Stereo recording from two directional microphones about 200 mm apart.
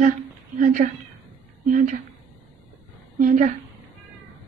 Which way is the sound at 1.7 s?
40° right (ahead or behind).